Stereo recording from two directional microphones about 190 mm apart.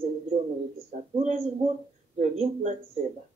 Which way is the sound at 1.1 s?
30° right (ahead or behind).